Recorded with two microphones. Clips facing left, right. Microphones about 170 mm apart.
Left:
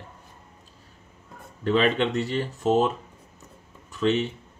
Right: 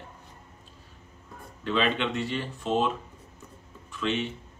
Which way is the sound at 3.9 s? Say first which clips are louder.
Left 6 dB; 40° left (ahead or behind).